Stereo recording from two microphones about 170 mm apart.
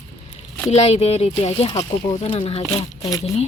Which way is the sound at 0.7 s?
40° left (ahead or behind).